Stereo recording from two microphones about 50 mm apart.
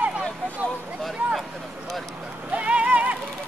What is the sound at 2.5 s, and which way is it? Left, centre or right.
Music, right.